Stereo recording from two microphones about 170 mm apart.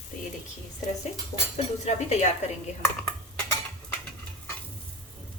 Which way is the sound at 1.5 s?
40° left (ahead or behind).